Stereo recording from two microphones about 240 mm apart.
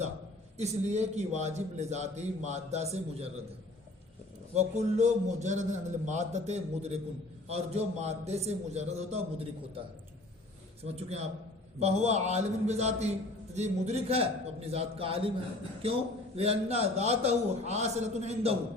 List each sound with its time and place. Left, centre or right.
0.5 s a man's voice: right
4.5 s a man's voice: right
10.8 s a man's voice: right